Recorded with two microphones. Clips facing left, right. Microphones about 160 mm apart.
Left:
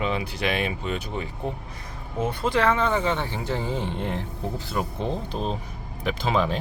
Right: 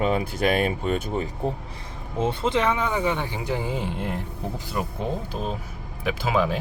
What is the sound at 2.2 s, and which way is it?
Speech, 25° right (ahead or behind).